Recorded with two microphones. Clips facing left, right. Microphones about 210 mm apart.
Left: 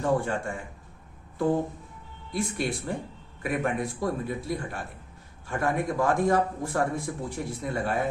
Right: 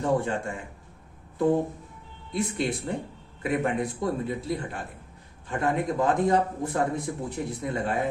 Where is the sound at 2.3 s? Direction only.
20° right (ahead or behind).